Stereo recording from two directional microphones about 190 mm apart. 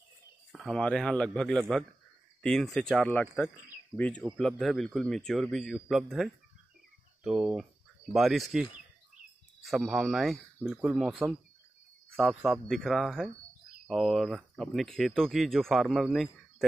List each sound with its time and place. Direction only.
0.5 s speech: centre (ahead or behind)